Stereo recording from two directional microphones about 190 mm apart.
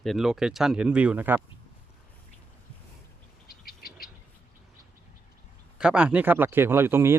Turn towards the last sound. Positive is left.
turn(degrees=-10)  # may be behind; listen again after turning